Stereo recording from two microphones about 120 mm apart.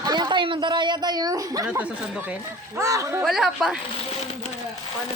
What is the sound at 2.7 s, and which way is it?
Speech, 25° right (ahead or behind).